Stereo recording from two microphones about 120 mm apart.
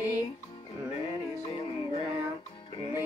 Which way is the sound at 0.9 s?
50° left (ahead or behind).